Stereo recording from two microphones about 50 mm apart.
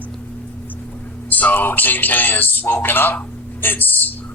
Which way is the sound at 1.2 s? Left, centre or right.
Left.